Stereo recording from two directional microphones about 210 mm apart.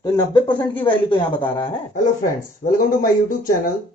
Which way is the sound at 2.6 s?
40° left (ahead or behind).